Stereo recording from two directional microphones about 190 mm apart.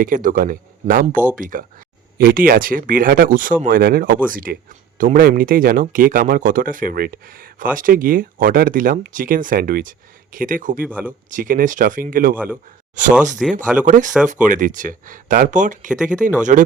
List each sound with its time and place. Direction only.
0.0 s speech: 45° right (ahead or behind)
10.8 s speech: 10° right (ahead or behind)
11.3 s speech: 45° right (ahead or behind)
13.4 s speech: centre (ahead or behind)
13.8 s speech: 40° right (ahead or behind)